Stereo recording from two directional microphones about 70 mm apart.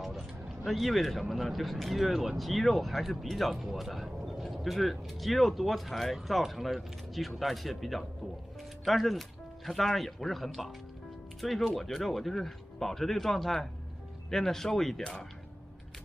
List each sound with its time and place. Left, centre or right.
0.7 s speech: centre